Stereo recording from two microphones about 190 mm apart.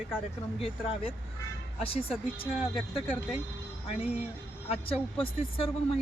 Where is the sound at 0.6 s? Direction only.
30° left (ahead or behind).